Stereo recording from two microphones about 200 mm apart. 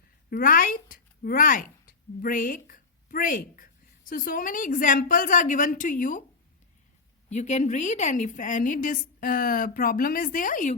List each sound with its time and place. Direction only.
0.3 s speech: 45° left (ahead or behind)
7.3 s a woman's voice: 35° left (ahead or behind)